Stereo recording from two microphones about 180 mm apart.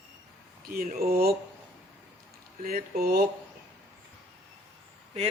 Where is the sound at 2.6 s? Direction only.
55° right (ahead or behind).